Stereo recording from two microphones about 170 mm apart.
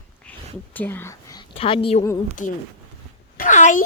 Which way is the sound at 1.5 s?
30° left (ahead or behind).